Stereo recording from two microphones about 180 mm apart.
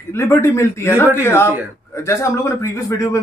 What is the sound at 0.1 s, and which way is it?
Speech, 15° left (ahead or behind).